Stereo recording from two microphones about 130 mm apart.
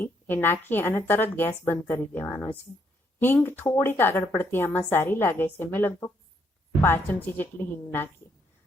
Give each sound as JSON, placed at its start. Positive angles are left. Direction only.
{"t": 0.0, "sound": "speech", "side_deg": 15}